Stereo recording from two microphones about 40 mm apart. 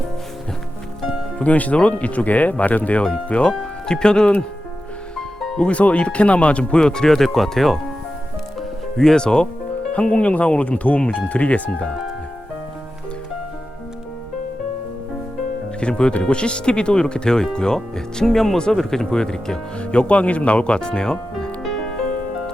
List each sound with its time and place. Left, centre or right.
1.4 s speech: left
3.6 s speech: centre
5.5 s speech: left
7.1 s speech: centre
9.0 s speech: centre; by 11.7 s left
15.8 s speech: left
19.8 s speech: left
21.6 s music: centre